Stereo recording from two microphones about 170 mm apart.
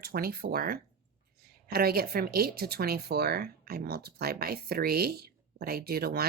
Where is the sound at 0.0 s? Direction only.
65° right (ahead or behind).